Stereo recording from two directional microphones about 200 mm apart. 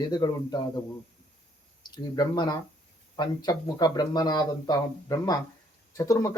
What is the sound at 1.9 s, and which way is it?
Speech, 20° left (ahead or behind).